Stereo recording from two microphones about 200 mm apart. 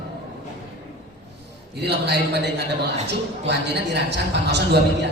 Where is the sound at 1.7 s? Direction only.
55° right (ahead or behind).